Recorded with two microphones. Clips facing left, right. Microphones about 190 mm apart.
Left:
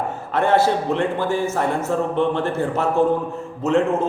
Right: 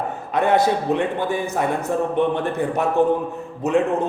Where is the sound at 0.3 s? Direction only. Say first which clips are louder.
Even; 15° right (ahead or behind).